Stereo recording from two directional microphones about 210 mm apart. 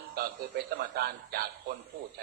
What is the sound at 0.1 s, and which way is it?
A man's voice, 45° right (ahead or behind).